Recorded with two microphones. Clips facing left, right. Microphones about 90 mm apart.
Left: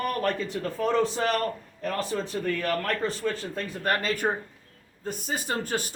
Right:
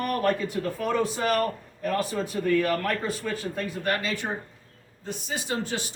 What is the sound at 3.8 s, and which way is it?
Speech, 45° left (ahead or behind).